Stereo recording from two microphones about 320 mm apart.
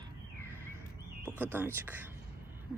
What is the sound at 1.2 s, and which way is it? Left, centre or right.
Speech, centre.